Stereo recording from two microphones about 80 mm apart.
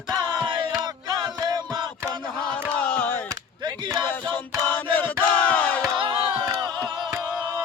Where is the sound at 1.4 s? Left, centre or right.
Right.